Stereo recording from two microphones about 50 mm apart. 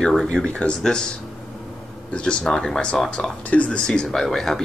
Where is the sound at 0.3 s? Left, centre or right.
Centre.